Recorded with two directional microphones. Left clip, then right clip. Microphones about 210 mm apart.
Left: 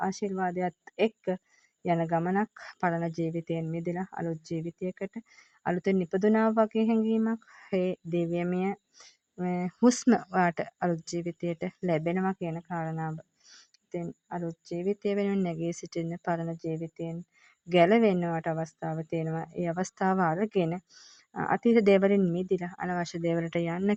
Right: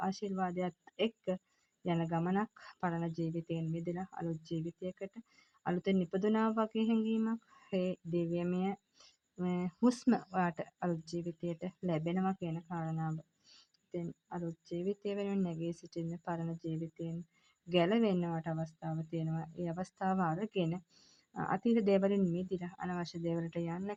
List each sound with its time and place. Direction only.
0.0 s a woman's voice: 35° left (ahead or behind)